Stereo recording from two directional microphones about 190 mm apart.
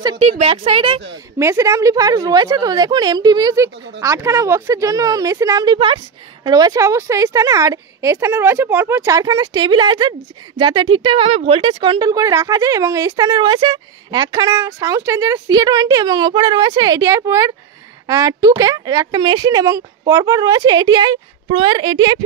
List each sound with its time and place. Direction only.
0.2 s speech: 30° right (ahead or behind)
1.4 s a woman's voice: 15° right (ahead or behind)